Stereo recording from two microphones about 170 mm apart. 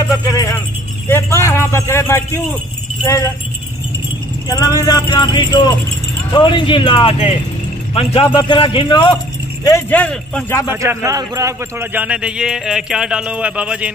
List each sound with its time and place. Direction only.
0.2 s music: 20° left (ahead or behind)
1.0 s a sound: 15° left (ahead or behind)
3.1 s speech: 15° left (ahead or behind)
4.5 s speech: 20° left (ahead or behind)
9.7 s speech: 15° left (ahead or behind)
10.7 s a man's voice: 15° right (ahead or behind)